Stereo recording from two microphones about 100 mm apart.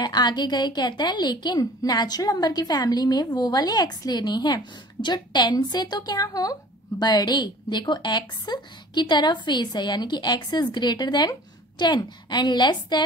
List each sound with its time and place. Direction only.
0.0 s a woman's voice: 45° left (ahead or behind)